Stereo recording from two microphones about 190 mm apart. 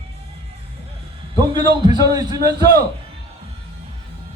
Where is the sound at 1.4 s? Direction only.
20° right (ahead or behind).